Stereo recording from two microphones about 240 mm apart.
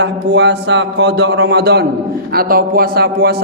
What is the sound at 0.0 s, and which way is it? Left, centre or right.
A man's voice, right.